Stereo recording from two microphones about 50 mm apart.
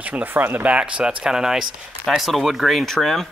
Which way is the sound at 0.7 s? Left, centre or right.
Right.